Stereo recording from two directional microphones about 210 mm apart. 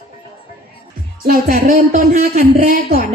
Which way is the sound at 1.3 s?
45° right (ahead or behind).